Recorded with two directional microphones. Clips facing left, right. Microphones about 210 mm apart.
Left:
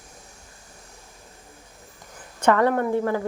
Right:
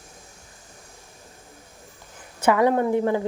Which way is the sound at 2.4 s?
10° right (ahead or behind).